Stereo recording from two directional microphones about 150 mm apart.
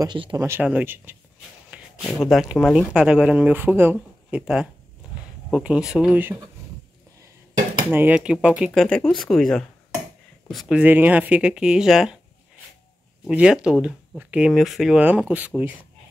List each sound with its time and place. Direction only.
0.0 s speech: 30° right (ahead or behind)
0.4 s speech: 15° right (ahead or behind)
1.7 s a sound: 10° right (ahead or behind)
2.0 s speech: centre (ahead or behind)
7.9 s speech: 10° right (ahead or behind)
8.7 s speech: 5° left (ahead or behind)
13.3 s speech: 5° right (ahead or behind)